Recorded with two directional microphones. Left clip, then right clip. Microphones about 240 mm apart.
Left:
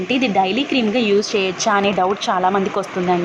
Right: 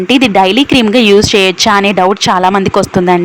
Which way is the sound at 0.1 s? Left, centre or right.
Right.